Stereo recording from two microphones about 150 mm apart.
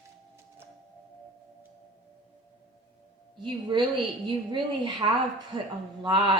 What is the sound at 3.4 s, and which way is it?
Speech, 30° right (ahead or behind).